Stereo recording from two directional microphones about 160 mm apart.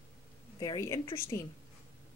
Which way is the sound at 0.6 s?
20° left (ahead or behind).